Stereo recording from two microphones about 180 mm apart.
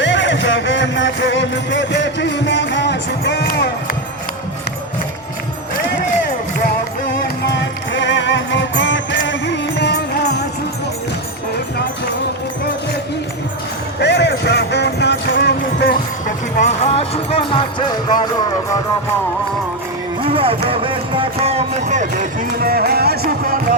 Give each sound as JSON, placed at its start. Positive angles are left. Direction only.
{"t": 0.0, "sound": "music", "side_deg": 85}
{"t": 7.4, "sound": "music", "side_deg": 75}
{"t": 14.0, "sound": "music", "side_deg": 70}
{"t": 16.6, "sound": "music", "side_deg": 35}
{"t": 20.2, "sound": "music", "side_deg": -30}
{"t": 22.5, "sound": "music", "side_deg": -60}